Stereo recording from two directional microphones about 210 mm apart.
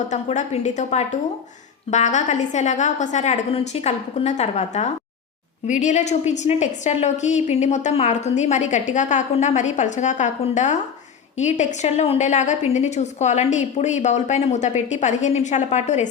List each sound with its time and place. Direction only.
0.1 s a woman's voice: 35° left (ahead or behind)